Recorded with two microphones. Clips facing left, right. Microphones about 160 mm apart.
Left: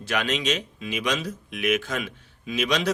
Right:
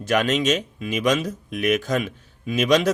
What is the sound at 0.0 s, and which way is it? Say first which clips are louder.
Speech: right 6 dB; 45° right (ahead or behind).